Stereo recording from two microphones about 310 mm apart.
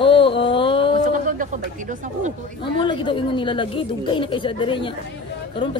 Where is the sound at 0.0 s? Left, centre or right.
Centre.